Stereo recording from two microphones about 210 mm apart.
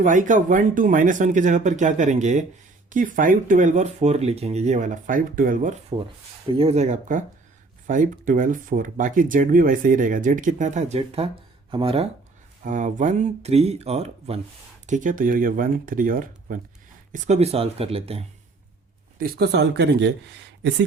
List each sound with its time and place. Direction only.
0.0 s speech: 35° right (ahead or behind)
6.5 s speech: 25° right (ahead or behind)
12.6 s speech: 35° right (ahead or behind)
19.2 s speech: 50° right (ahead or behind)